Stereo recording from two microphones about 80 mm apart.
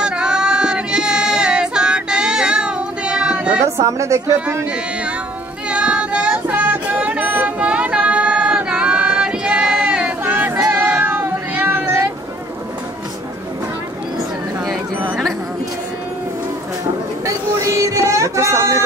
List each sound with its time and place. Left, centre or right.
0.0 s child singing: centre
3.6 s a woman's voice: right
5.7 s child singing: centre
10.2 s a sound: right
10.7 s cat: centre
17.3 s a sound: right